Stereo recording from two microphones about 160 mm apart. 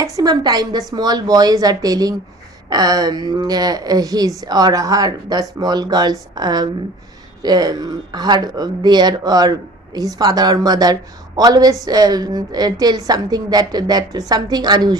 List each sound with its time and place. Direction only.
0.0 s a woman's voice: 25° right (ahead or behind)